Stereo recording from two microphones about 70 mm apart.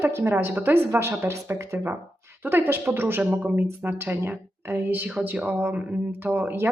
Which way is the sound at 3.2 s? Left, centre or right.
Centre.